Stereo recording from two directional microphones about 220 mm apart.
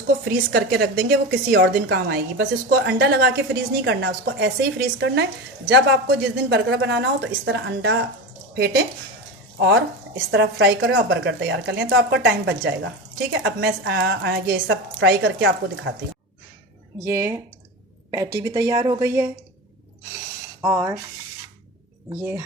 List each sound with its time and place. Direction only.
0.5 s a woman's voice: 45° right (ahead or behind)
10.3 s a woman's voice: 50° right (ahead or behind)
17.1 s a woman's voice: 10° right (ahead or behind)
20.6 s a sound: 10° right (ahead or behind)
22.2 s a woman's voice: 10° right (ahead or behind)